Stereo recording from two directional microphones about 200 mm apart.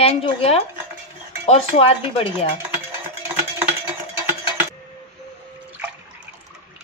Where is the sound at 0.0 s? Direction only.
30° left (ahead or behind).